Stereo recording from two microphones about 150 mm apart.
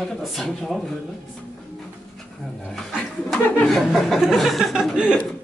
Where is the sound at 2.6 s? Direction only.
Centre (ahead or behind).